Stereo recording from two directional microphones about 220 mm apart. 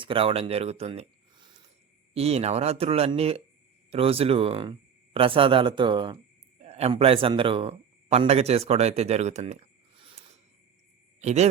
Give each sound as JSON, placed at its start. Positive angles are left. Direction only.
{"t": 0.0, "sound": "speech", "side_deg": -25}
{"t": 11.2, "sound": "speech", "side_deg": -30}